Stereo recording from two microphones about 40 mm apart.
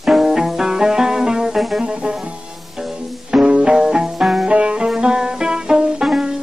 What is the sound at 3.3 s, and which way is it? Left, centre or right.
Music, right.